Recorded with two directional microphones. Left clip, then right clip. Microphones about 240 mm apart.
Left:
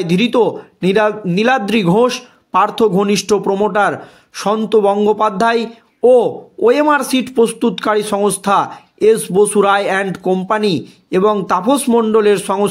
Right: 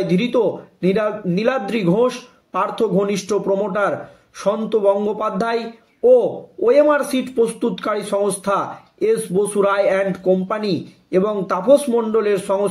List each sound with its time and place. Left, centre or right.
0.0 s speech: left